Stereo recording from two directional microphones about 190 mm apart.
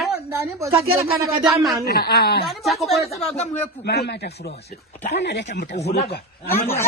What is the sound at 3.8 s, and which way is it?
A man's voice, 60° left (ahead or behind).